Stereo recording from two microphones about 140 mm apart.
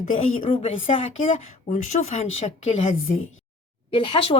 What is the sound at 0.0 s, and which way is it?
Speech, 65° left (ahead or behind).